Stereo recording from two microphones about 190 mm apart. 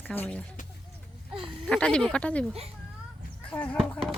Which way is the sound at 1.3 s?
25° right (ahead or behind).